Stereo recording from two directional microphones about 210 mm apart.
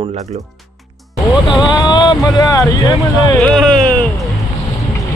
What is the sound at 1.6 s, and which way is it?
Speech, 20° left (ahead or behind).